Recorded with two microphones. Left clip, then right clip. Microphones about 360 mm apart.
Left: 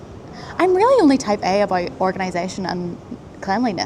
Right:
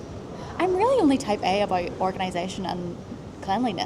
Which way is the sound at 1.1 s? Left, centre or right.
Left.